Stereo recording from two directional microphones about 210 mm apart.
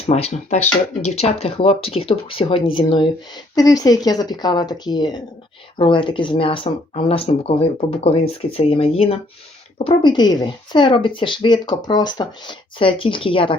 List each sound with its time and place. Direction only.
0.0 s speech: 30° left (ahead or behind)